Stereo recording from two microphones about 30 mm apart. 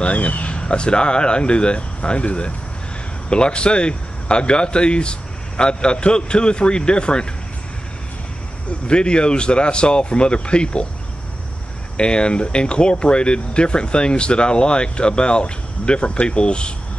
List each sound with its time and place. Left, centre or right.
0.0 s speech: left
0.6 s speech: left
8.8 s speech: left
12.0 s speech: left